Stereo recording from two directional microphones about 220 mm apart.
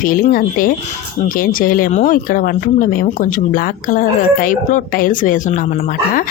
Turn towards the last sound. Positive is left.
turn(degrees=35)  # may be behind; listen again after turning